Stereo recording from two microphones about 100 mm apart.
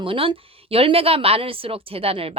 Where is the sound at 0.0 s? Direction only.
60° right (ahead or behind).